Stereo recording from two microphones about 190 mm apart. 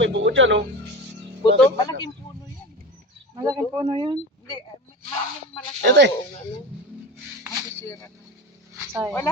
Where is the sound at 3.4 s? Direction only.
20° right (ahead or behind).